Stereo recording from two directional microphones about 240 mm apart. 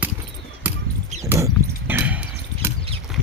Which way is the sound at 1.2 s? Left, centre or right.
Centre.